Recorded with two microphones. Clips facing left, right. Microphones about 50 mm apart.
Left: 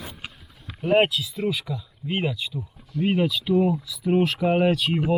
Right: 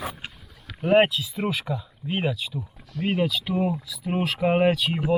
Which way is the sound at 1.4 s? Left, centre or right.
Right.